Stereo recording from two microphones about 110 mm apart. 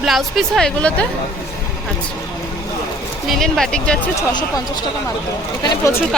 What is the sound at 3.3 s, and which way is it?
Speech, 5° left (ahead or behind).